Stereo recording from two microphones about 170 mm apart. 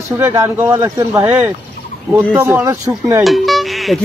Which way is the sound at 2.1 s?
10° right (ahead or behind).